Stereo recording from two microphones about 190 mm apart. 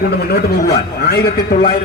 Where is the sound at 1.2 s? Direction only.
50° left (ahead or behind).